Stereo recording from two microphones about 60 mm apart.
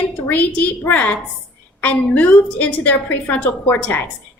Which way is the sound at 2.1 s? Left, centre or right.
Left.